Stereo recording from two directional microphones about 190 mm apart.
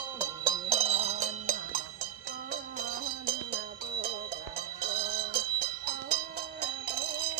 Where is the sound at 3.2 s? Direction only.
55° right (ahead or behind).